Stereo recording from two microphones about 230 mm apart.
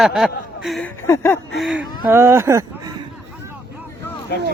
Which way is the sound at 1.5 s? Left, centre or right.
Centre.